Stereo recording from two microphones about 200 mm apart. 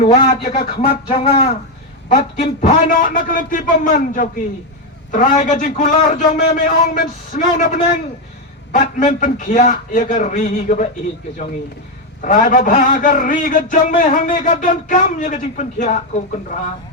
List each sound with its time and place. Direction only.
0.0 s a man's voice: 35° left (ahead or behind)
12.2 s a man's voice: 40° left (ahead or behind)